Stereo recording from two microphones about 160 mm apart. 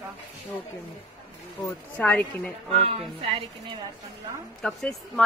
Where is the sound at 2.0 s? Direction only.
10° left (ahead or behind).